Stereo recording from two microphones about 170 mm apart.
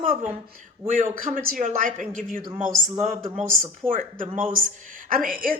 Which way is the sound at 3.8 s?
45° right (ahead or behind).